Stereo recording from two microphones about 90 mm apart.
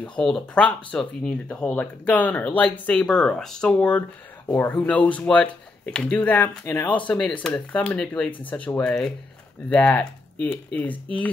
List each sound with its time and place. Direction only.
0.0 s speech: 10° left (ahead or behind)